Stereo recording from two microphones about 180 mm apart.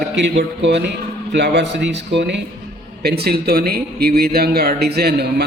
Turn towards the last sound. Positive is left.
turn(degrees=-60)  # may be behind; listen again after turning